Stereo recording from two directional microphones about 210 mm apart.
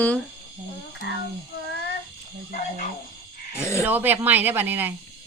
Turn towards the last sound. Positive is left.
turn(degrees=-10)  # may be behind; listen again after turning